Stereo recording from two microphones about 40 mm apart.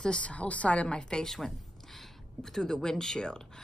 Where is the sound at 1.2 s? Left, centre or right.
Centre.